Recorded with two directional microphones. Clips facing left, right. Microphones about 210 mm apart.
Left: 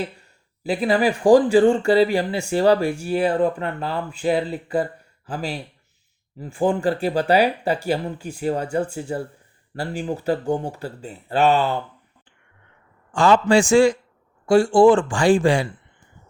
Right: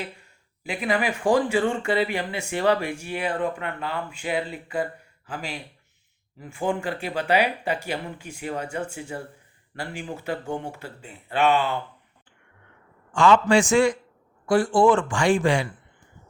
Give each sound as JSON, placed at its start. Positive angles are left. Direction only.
{"t": 0.6, "sound": "speech", "side_deg": 35}
{"t": 13.1, "sound": "speech", "side_deg": 35}